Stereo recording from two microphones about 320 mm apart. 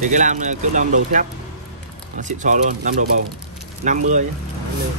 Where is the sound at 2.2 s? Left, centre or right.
Right.